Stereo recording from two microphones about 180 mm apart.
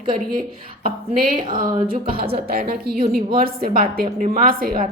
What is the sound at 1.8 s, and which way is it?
A woman's voice, 55° right (ahead or behind).